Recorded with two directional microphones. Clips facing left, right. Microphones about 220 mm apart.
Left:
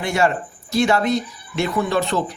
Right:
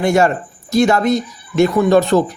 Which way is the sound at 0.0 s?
45° right (ahead or behind).